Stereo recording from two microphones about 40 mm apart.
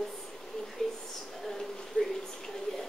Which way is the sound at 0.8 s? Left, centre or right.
Centre.